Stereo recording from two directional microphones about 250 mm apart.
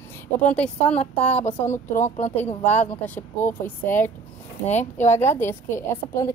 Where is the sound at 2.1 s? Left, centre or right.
Left.